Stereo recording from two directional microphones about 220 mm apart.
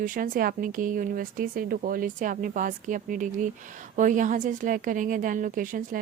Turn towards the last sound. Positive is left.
turn(degrees=-35)  # may be behind; listen again after turning